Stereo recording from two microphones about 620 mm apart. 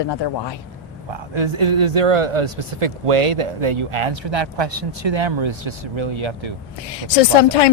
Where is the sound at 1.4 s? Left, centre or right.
Right.